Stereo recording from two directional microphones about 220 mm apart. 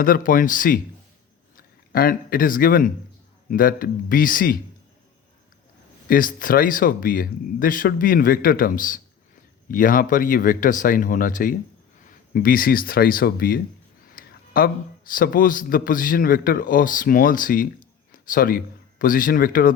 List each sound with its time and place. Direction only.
0.0 s speech: 40° left (ahead or behind)
6.1 s a man's voice: 40° left (ahead or behind)